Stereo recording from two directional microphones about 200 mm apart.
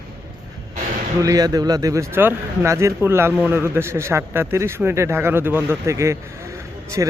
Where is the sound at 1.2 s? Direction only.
20° right (ahead or behind).